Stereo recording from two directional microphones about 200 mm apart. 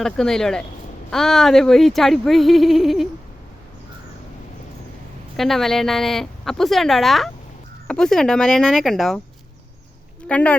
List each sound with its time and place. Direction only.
0.0 s speech: centre (ahead or behind)
5.4 s speech: centre (ahead or behind)
10.2 s speech: 5° left (ahead or behind)